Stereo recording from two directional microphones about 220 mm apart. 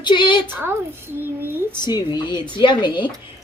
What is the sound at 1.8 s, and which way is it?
A woman's voice, 20° left (ahead or behind).